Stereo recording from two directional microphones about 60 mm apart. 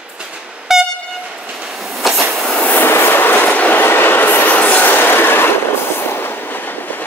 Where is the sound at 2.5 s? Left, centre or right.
Left.